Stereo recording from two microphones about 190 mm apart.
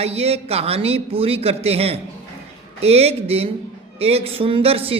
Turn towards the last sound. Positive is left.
turn(degrees=-30)  # may be behind; listen again after turning